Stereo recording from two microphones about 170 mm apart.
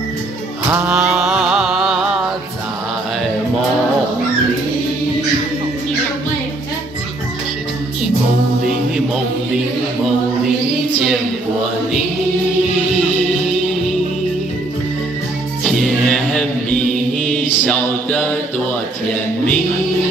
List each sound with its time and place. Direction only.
0.7 s mantra: 15° right (ahead or behind)
0.9 s music: 5° right (ahead or behind)
15.6 s music: centre (ahead or behind)
17.2 s mantra: 5° left (ahead or behind)